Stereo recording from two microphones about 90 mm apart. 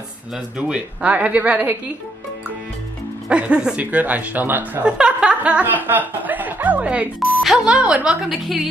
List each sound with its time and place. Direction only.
0.6 s speech: 15° right (ahead or behind)
3.3 s speech: 10° right (ahead or behind)
4.9 s speech: 10° right (ahead or behind)